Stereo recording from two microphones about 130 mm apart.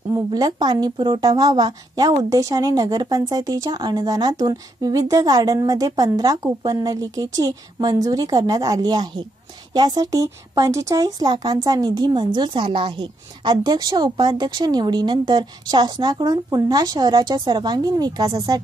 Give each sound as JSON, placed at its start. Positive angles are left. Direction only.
{"t": 0.1, "sound": "a woman's voice", "side_deg": -30}